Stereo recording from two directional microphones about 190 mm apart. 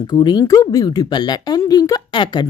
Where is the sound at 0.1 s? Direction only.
25° left (ahead or behind).